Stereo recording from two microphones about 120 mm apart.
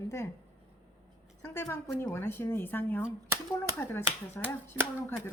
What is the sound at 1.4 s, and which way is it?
Speech, 20° left (ahead or behind).